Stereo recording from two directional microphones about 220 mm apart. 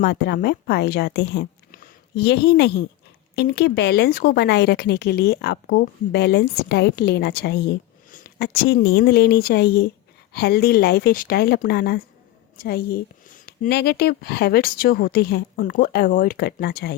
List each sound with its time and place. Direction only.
0.0 s a woman's voice: 45° left (ahead or behind)